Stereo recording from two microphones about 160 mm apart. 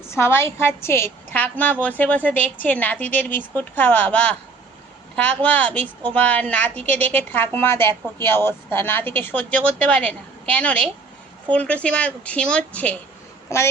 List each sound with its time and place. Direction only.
0.0 s a woman's voice: 15° left (ahead or behind)